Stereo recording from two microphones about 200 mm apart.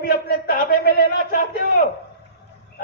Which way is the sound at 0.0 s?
50° left (ahead or behind).